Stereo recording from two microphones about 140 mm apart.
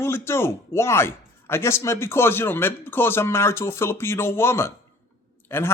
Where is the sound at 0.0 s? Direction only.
20° left (ahead or behind).